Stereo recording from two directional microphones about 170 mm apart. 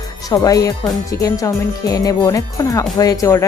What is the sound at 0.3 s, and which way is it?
Speech, 20° left (ahead or behind).